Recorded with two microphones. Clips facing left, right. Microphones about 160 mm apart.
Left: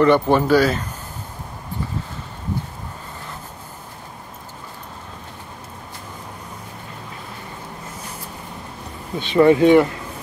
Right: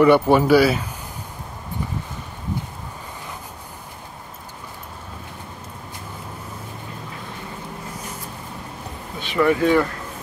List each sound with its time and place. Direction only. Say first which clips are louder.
0.0 s speech: right 1 dB; 10° right (ahead or behind)
9.2 s speech: left 5 dB; 25° left (ahead or behind)